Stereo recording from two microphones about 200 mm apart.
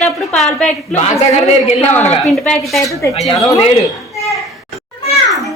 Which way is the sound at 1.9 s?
5° left (ahead or behind).